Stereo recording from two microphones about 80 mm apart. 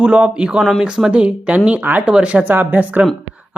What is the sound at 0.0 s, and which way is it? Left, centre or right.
Speech, centre.